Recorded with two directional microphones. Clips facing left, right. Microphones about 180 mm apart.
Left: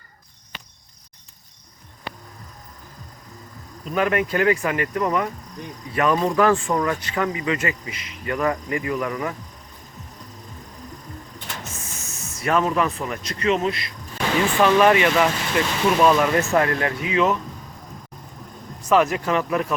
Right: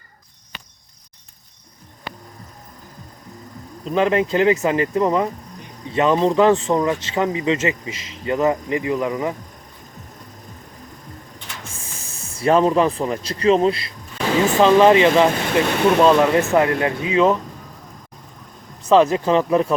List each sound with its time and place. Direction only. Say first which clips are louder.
3.8 s speech: right 4 dB; 25° right (ahead or behind)
11.6 s speech: left 1 dB; 30° right (ahead or behind)
18.9 s speech: right 5 dB; 30° right (ahead or behind)